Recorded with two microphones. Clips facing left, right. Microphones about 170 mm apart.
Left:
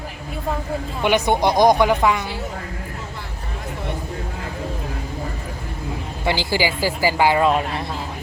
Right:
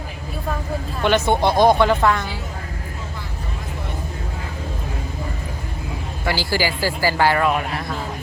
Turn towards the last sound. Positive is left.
turn(degrees=25)  # may be behind; listen again after turning